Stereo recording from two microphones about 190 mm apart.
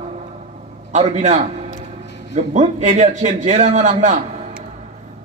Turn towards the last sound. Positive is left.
turn(degrees=-40)  # may be behind; listen again after turning